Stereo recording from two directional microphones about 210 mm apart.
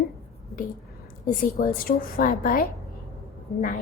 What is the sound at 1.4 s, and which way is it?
A woman's voice, 40° left (ahead or behind).